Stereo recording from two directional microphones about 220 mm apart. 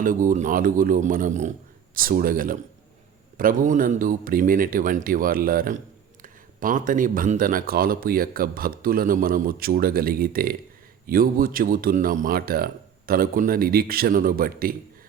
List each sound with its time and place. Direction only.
0.0 s speech: 35° right (ahead or behind)